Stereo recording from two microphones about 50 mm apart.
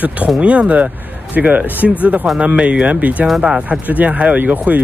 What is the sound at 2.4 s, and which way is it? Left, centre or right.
Speech, right.